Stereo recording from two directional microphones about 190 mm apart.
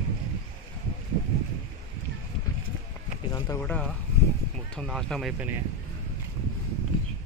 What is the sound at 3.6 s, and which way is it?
Speech, 5° left (ahead or behind).